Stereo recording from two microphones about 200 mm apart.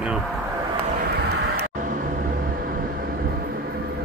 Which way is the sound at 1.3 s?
50° right (ahead or behind).